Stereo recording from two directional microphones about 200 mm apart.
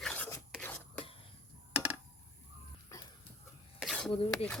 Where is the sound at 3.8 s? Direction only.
Centre (ahead or behind).